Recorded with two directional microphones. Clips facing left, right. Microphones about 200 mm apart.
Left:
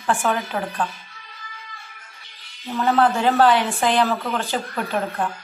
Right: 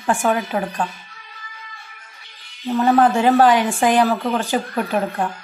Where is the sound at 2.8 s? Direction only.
15° right (ahead or behind).